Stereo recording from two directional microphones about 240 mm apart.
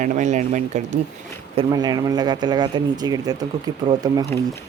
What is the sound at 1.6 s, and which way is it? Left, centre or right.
Speech, centre.